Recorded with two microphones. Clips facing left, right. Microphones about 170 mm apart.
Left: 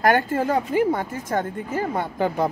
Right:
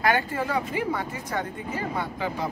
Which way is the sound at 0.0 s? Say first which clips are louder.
Left 5 dB; 50° left (ahead or behind).